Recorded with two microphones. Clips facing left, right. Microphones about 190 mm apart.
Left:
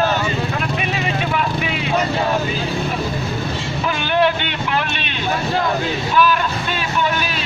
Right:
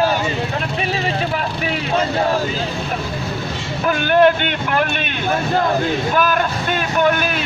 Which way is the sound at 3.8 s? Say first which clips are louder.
Right 5 dB; 50° right (ahead or behind).